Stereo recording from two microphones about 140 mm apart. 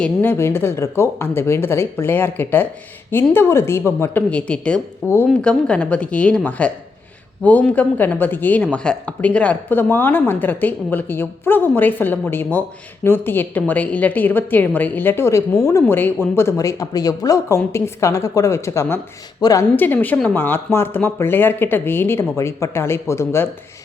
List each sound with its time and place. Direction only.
0.0 s a woman's voice: 15° left (ahead or behind)
7.7 s a woman's voice: 10° left (ahead or behind)
19.7 s a woman's voice: 10° left (ahead or behind)